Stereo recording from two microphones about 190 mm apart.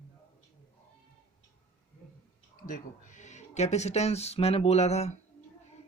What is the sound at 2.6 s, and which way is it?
A man's voice, 45° left (ahead or behind).